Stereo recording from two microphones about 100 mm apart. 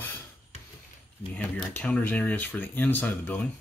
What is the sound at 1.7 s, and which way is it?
Speech, 15° left (ahead or behind).